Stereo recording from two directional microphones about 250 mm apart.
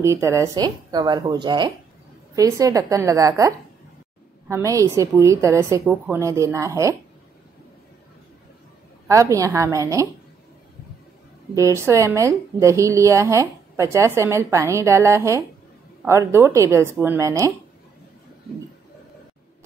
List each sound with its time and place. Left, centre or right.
0.0 s a woman's voice: centre
9.0 s a woman's voice: centre
11.5 s a woman's voice: centre